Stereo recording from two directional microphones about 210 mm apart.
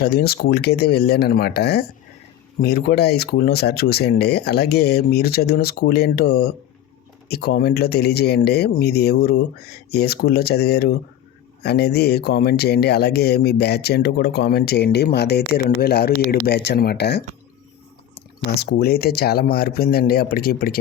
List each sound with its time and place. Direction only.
0.0 s speech: 50° left (ahead or behind)
18.6 s speech: 50° left (ahead or behind)